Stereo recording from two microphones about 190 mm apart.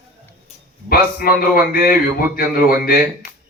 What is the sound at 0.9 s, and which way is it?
A man's voice, 50° left (ahead or behind).